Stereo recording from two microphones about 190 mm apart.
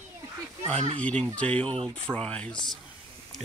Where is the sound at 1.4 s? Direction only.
5° left (ahead or behind).